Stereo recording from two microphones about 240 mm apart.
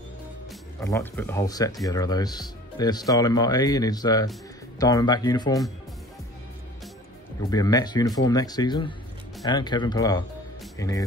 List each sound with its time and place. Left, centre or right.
0.7 s speech: centre
7.4 s speech: centre